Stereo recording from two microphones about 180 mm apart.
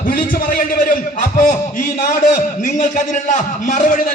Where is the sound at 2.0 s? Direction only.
45° left (ahead or behind).